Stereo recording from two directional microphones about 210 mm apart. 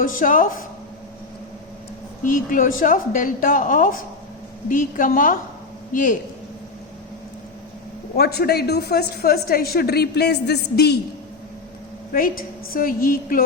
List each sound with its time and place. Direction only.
0.0 s a woman's voice: 40° left (ahead or behind)
2.2 s a woman's voice: 40° left (ahead or behind)
8.1 s a woman's voice: 50° left (ahead or behind)
12.1 s a woman's voice: 45° left (ahead or behind)